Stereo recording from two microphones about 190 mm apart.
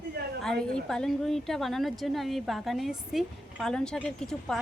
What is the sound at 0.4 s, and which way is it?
A woman's voice, 5° left (ahead or behind).